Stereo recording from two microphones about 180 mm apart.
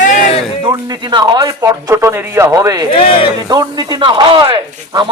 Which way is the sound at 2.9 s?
30° left (ahead or behind).